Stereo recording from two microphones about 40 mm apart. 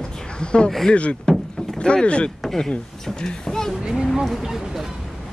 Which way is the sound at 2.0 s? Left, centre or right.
Left.